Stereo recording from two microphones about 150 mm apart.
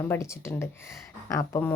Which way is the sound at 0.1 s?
20° left (ahead or behind).